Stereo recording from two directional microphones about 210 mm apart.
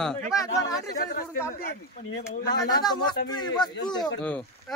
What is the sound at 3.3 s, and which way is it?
Speech, 20° left (ahead or behind).